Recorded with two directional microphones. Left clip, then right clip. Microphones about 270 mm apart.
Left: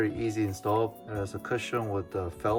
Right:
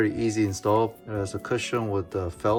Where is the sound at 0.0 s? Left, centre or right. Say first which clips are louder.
Right 5 dB; centre.